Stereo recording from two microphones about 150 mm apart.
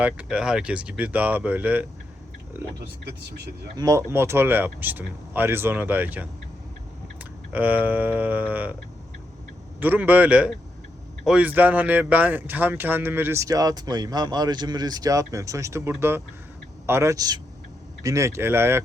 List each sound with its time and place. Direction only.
0.0 s speech: 5° right (ahead or behind)
3.8 s speech: 20° right (ahead or behind)
9.8 s speech: 10° right (ahead or behind)